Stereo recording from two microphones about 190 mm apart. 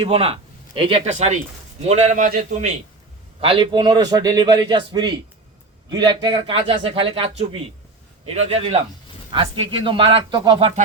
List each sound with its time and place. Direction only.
0.0 s a man's voice: 30° right (ahead or behind)
3.4 s a man's voice: 25° right (ahead or behind)